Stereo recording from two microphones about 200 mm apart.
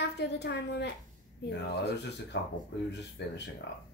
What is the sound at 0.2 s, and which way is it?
Speech, 55° left (ahead or behind).